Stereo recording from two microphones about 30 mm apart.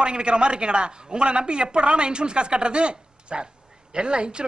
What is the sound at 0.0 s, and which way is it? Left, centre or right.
Speech, right.